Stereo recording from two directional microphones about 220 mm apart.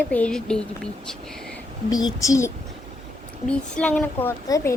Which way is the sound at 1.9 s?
15° left (ahead or behind).